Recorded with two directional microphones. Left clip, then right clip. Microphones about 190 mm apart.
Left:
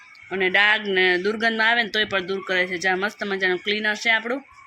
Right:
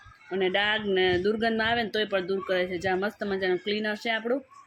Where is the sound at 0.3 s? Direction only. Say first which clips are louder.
Left 7 dB; 5° right (ahead or behind).